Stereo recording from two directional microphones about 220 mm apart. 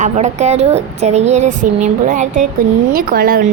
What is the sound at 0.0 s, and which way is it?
Speech, 30° right (ahead or behind).